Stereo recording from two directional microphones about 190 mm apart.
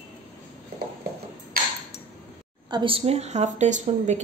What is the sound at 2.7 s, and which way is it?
A woman's voice, 25° right (ahead or behind).